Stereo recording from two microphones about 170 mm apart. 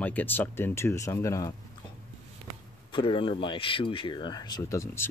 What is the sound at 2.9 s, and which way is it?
Speech, 30° left (ahead or behind).